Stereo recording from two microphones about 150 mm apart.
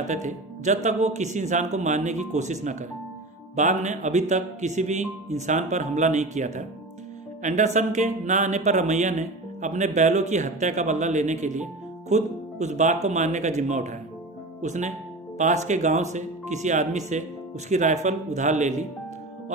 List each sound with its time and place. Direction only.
0.0 s speech: 55° right (ahead or behind)